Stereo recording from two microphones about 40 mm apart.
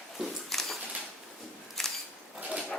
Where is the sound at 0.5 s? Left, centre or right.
Centre.